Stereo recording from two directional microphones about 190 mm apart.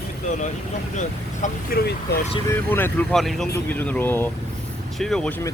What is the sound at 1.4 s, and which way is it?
Speech, 55° left (ahead or behind).